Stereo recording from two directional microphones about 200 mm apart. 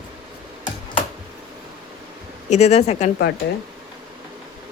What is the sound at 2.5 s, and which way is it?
Speech, 30° left (ahead or behind).